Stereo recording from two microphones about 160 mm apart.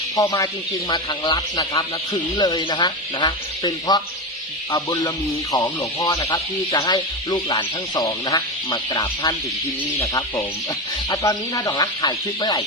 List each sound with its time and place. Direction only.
0.2 s speech: 20° left (ahead or behind)